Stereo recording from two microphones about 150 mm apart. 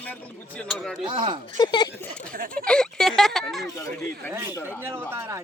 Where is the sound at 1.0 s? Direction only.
30° right (ahead or behind).